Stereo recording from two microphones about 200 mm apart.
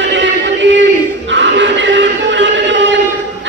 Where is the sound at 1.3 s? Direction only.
65° right (ahead or behind).